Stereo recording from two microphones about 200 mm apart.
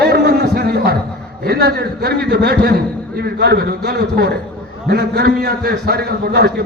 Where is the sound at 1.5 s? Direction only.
50° right (ahead or behind).